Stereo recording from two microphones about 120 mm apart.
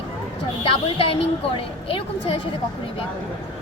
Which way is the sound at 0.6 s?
50° left (ahead or behind).